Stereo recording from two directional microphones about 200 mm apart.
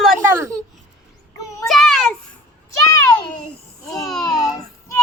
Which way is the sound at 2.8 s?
20° left (ahead or behind).